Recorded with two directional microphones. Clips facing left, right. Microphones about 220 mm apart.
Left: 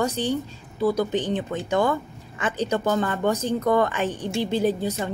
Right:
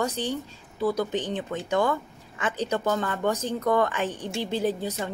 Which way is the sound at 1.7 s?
30° left (ahead or behind).